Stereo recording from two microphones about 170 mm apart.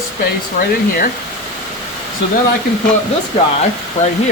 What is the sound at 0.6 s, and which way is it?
Speech, 60° left (ahead or behind).